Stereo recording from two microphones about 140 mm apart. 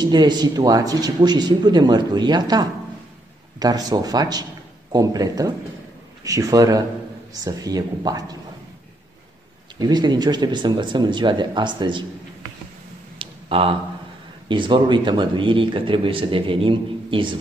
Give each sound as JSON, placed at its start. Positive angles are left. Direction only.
{"t": 0.0, "sound": "a man's voice", "side_deg": -30}
{"t": 9.8, "sound": "a man's voice", "side_deg": -30}
{"t": 13.2, "sound": "a sound", "side_deg": -40}
{"t": 14.5, "sound": "a man's voice", "side_deg": -35}